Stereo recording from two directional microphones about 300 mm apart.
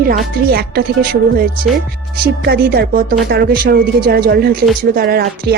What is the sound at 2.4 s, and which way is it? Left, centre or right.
Speech, right.